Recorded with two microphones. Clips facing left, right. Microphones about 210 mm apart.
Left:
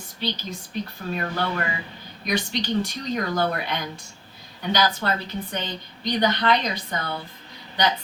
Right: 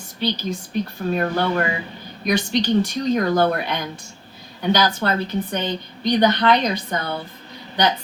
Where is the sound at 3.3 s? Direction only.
55° right (ahead or behind).